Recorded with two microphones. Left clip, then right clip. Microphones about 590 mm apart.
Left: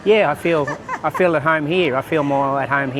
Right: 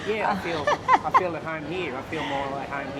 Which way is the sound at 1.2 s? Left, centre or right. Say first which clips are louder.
Left 13 dB; left.